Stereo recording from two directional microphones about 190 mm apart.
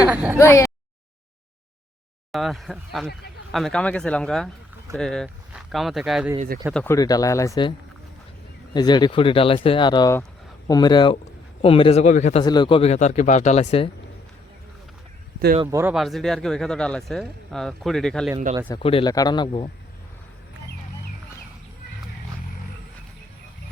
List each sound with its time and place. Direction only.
0.1 s speech: 10° right (ahead or behind)
0.3 s speech: 15° left (ahead or behind)
2.3 s speech: centre (ahead or behind)
6.7 s speech: 15° left (ahead or behind)
8.7 s a man's voice: 20° left (ahead or behind); by 12.4 s 40° left (ahead or behind)
12.4 s a man's voice: 25° left (ahead or behind)
15.6 s speech: 15° right (ahead or behind)
16.0 s speech: centre (ahead or behind)
18.8 s speech: 30° left (ahead or behind)